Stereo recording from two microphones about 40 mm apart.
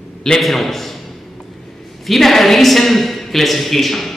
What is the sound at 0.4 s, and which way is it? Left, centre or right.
Speech, centre.